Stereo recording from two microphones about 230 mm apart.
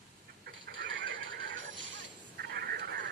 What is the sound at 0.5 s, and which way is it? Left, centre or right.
Neigh, right.